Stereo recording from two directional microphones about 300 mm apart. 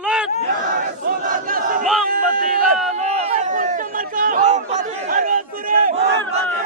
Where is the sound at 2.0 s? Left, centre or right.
Right.